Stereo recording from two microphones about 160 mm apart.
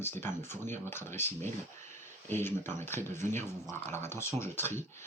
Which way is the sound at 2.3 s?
15° left (ahead or behind).